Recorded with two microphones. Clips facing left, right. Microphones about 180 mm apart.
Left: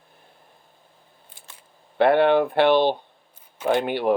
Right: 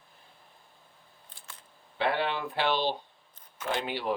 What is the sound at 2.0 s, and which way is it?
Speech, 60° left (ahead or behind).